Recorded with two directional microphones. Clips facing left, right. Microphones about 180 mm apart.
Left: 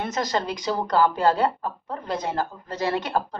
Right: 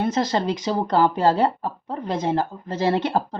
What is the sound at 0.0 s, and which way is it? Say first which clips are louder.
A woman's voice: right 4 dB; 30° right (ahead or behind).